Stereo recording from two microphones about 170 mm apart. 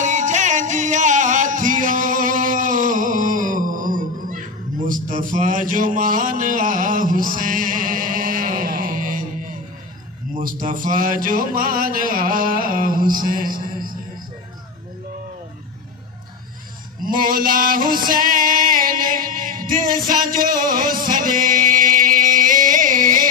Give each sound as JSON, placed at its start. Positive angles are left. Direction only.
{"t": 0.0, "sound": "music", "side_deg": -45}
{"t": 4.8, "sound": "mantra", "side_deg": -50}
{"t": 10.3, "sound": "music", "side_deg": -55}
{"t": 17.0, "sound": "male singing", "side_deg": -55}
{"t": 20.1, "sound": "music", "side_deg": -55}